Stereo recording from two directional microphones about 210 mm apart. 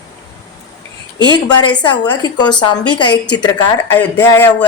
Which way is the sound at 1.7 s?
20° left (ahead or behind).